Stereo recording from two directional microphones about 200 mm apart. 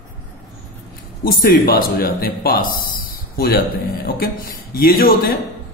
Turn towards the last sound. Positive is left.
turn(degrees=50)  # may be behind; listen again after turning